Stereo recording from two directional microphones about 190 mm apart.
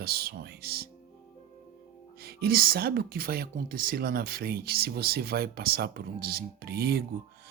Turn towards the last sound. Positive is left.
turn(degrees=-55)  # may be behind; listen again after turning